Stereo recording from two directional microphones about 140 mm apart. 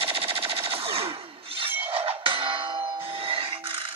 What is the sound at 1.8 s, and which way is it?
Music, 40° right (ahead or behind).